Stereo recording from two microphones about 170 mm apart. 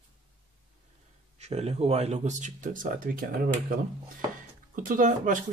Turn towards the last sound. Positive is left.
turn(degrees=-50)  # may be behind; listen again after turning